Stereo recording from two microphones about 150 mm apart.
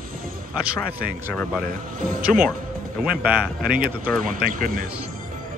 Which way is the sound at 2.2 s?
5° right (ahead or behind).